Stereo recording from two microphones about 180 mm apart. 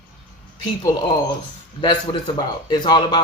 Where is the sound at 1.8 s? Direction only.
25° left (ahead or behind).